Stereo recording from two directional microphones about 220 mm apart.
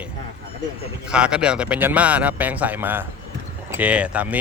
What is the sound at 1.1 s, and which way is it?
Speech, 5° right (ahead or behind).